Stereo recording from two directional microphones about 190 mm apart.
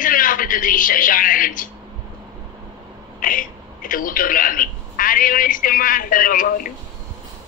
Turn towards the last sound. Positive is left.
turn(degrees=45)  # may be behind; listen again after turning